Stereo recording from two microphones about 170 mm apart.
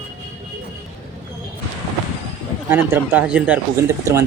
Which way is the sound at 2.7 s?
15° right (ahead or behind).